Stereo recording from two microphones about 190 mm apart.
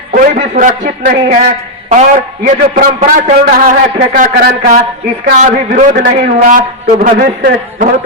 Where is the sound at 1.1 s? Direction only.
60° right (ahead or behind).